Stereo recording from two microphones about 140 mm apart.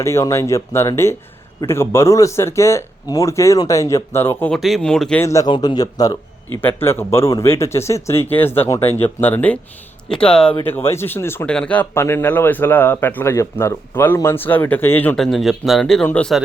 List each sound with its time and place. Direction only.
0.0 s speech: 20° left (ahead or behind)
4.5 s speech: centre (ahead or behind)
5.2 s speech: 20° left (ahead or behind)
6.6 s speech: 15° left (ahead or behind)